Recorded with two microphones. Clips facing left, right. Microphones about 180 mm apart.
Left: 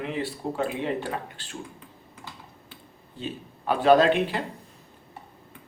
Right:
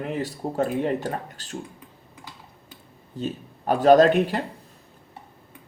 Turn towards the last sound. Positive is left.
turn(degrees=-40)  # may be behind; listen again after turning